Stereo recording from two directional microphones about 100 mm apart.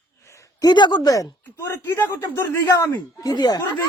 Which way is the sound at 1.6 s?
25° left (ahead or behind).